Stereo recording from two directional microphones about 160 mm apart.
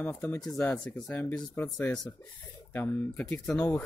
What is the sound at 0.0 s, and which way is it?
Speech, 10° left (ahead or behind).